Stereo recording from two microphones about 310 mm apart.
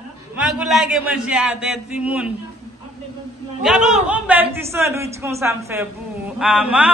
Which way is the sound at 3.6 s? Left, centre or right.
Centre.